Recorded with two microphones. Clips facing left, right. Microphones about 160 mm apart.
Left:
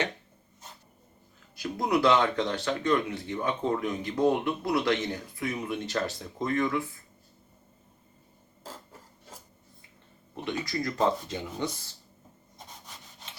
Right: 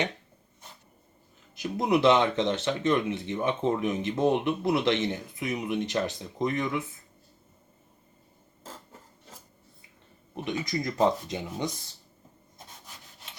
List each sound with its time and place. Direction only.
1.5 s speech: 20° right (ahead or behind)
10.3 s speech: 15° right (ahead or behind)